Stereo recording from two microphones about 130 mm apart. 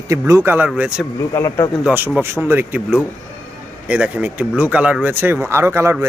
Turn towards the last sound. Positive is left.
turn(degrees=-20)  # may be behind; listen again after turning